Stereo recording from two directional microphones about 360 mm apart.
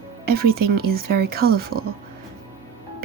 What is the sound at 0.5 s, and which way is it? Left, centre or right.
Speech, right.